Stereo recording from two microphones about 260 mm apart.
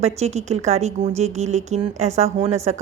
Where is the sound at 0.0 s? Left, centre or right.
Right.